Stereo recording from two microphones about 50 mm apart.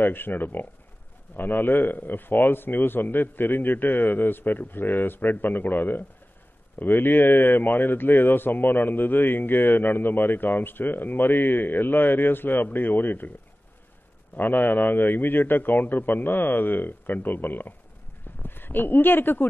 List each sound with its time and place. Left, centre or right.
0.0 s a man's voice: left
14.3 s speech: left